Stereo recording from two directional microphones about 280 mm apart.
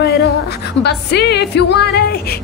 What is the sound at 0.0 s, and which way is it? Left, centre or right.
Music, left.